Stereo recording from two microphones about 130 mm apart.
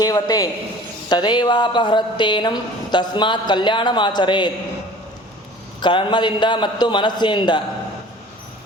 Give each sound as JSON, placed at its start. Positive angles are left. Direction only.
{"t": 0.0, "sound": "a woman's voice", "side_deg": 30}
{"t": 5.8, "sound": "speech", "side_deg": 35}